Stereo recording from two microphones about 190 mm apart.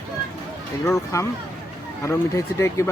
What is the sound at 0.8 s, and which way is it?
Speech, 15° left (ahead or behind).